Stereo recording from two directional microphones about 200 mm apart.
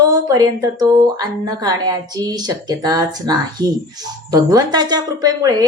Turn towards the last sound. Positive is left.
turn(degrees=-20)  # may be behind; listen again after turning